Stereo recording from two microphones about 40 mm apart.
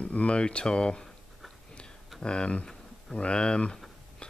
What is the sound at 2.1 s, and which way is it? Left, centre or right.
Speech, left.